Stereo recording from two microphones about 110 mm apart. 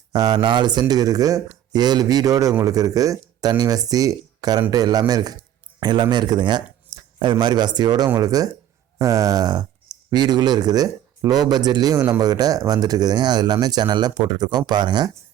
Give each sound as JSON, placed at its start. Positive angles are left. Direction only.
{"t": 0.1, "sound": "speech", "side_deg": -40}